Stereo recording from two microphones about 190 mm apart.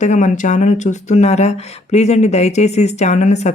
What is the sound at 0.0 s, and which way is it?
Speech, 40° left (ahead or behind).